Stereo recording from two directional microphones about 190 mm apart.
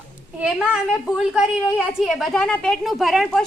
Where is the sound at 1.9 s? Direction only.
Centre (ahead or behind).